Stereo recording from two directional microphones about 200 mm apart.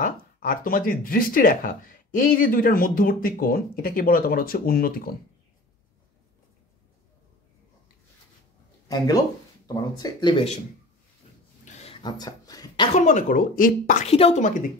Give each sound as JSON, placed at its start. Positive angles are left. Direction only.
{"t": 0.0, "sound": "speech", "side_deg": 45}
{"t": 8.8, "sound": "speech", "side_deg": 20}
{"t": 11.6, "sound": "a sound", "side_deg": 30}
{"t": 12.9, "sound": "a woman's voice", "side_deg": 35}